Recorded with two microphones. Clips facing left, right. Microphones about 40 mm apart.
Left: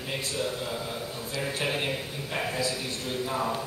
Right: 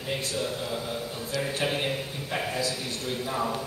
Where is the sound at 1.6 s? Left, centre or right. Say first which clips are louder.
Right 1 dB; centre.